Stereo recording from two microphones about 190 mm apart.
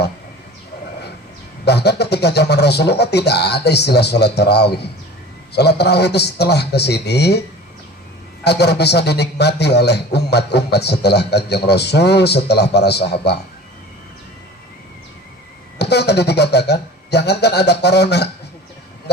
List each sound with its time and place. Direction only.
1.6 s a man's voice: 60° left (ahead or behind)
8.4 s a man's voice: 60° left (ahead or behind)
15.8 s a sound: 60° left (ahead or behind)